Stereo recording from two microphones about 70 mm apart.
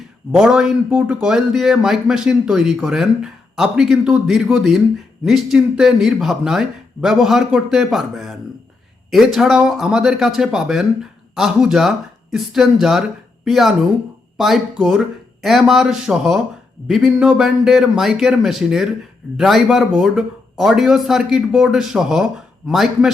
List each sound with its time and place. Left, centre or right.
0.3 s speech: centre
0.9 s speech: centre
1.2 s speech: centre